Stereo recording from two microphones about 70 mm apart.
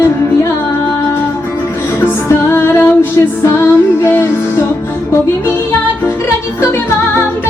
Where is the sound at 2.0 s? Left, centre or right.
Left.